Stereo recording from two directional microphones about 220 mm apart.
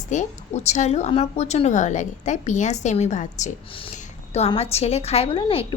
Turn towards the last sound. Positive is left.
turn(degrees=25)  # may be behind; listen again after turning